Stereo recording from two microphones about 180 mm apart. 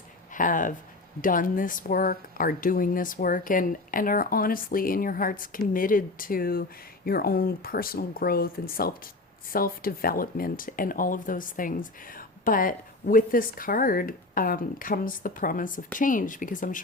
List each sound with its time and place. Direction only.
0.3 s speech: 45° left (ahead or behind)